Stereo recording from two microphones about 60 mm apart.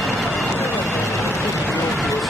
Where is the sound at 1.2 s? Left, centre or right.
Left.